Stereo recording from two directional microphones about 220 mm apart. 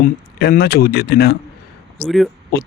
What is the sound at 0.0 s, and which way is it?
Speech, 40° left (ahead or behind).